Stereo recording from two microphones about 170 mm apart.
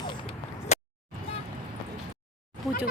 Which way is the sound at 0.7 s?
40° left (ahead or behind).